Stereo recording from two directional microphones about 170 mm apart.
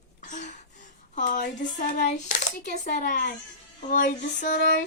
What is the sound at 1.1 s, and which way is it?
Hands, 50° left (ahead or behind).